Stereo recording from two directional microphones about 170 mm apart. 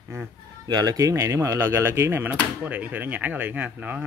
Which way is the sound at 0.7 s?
25° right (ahead or behind).